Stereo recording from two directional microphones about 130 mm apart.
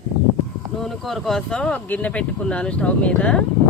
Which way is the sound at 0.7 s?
Centre (ahead or behind).